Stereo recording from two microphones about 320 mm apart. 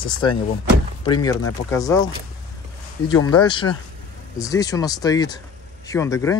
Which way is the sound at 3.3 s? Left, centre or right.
Centre.